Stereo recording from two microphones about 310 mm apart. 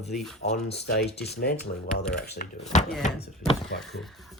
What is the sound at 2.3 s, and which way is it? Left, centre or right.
Speech, left.